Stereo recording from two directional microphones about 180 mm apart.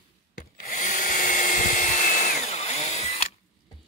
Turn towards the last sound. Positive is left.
turn(degrees=35)  # may be behind; listen again after turning